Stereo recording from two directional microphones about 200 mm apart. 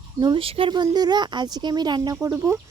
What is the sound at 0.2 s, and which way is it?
Speech, 25° right (ahead or behind).